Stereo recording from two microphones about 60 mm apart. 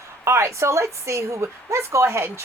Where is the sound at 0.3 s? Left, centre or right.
Right.